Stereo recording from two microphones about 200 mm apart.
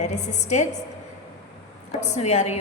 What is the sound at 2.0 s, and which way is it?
Speech, 35° left (ahead or behind).